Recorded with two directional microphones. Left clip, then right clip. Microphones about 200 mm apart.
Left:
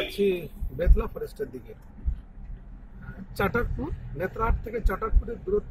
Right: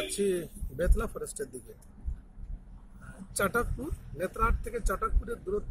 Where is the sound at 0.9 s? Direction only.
10° right (ahead or behind).